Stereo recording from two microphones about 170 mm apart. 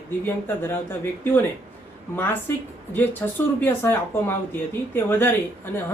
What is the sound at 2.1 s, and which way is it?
A woman's voice, 10° left (ahead or behind).